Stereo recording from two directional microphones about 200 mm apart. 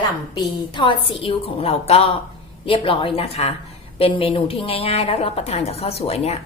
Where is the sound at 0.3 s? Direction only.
25° left (ahead or behind).